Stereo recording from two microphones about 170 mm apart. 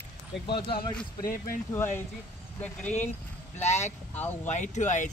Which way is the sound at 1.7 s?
15° left (ahead or behind).